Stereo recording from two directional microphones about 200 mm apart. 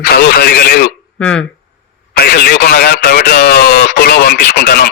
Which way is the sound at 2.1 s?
55° left (ahead or behind).